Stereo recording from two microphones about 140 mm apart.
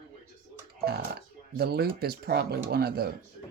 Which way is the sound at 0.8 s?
90° right.